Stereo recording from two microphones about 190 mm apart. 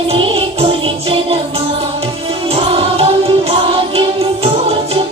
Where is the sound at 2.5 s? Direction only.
30° right (ahead or behind).